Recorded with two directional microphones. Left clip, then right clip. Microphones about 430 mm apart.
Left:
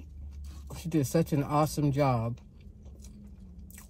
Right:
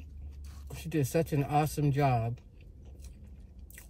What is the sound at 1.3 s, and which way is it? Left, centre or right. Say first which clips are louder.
Speech: left 2 dB; centre.